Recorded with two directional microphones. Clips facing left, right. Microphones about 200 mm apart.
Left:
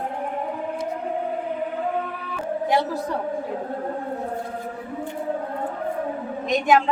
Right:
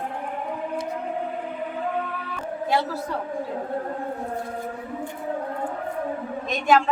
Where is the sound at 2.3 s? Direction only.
15° left (ahead or behind).